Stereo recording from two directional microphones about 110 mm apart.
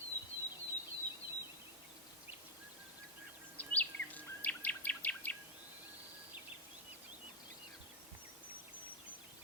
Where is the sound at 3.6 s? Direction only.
15° left (ahead or behind).